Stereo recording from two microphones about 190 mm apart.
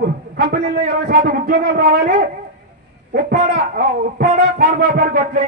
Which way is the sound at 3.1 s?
45° right (ahead or behind).